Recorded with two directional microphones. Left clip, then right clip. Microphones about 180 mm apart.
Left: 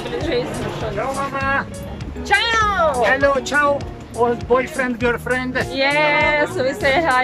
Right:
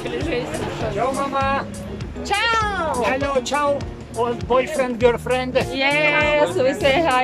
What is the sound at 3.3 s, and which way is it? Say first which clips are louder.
Speech: left 3 dB; 15° right (ahead or behind).